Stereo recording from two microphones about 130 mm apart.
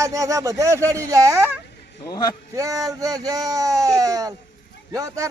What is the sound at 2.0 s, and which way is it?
Speech, 30° left (ahead or behind).